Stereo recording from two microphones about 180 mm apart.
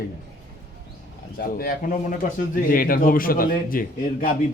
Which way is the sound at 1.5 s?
50° left (ahead or behind).